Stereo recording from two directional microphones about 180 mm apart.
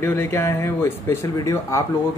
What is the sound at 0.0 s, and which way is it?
Speech, 15° left (ahead or behind).